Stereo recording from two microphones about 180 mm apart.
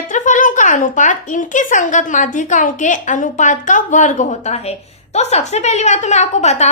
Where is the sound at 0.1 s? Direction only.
45° left (ahead or behind).